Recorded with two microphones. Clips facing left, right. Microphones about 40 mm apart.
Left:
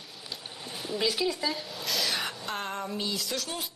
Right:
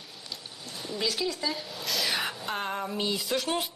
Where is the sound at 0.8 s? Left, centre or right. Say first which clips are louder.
Left 2 dB; centre.